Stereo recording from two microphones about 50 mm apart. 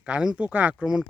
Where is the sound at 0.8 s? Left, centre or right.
Centre.